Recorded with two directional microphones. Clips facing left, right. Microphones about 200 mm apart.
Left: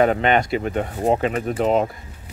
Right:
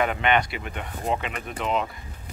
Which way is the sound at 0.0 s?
40° left (ahead or behind).